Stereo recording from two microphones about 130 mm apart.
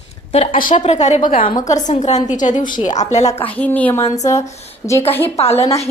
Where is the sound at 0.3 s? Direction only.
80° left.